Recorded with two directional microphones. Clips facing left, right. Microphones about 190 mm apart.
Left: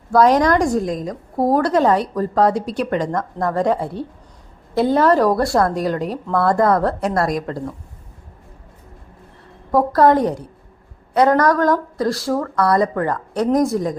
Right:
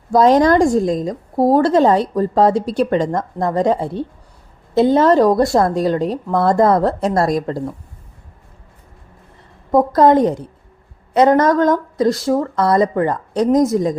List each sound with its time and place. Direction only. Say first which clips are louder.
0.1 s a woman's voice: right 2 dB; 25° right (ahead or behind)
9.7 s a woman's voice: right 2 dB; 20° right (ahead or behind)